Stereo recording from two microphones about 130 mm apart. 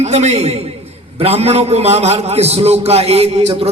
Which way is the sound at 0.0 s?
55° right (ahead or behind).